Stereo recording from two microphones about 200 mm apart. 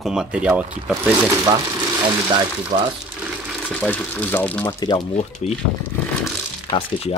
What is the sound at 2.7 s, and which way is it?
Speech, 35° right (ahead or behind).